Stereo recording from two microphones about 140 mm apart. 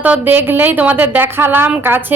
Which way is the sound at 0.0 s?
10° right (ahead or behind).